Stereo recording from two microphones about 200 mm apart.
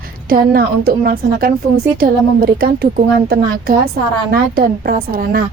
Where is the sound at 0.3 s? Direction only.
50° right (ahead or behind).